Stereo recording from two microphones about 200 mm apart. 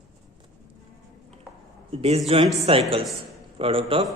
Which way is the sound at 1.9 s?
30° right (ahead or behind).